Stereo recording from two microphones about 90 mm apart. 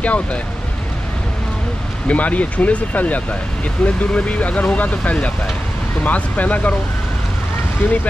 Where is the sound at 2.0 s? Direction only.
15° left (ahead or behind).